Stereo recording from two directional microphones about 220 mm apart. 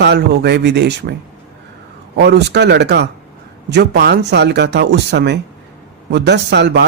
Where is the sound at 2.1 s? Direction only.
50° right (ahead or behind).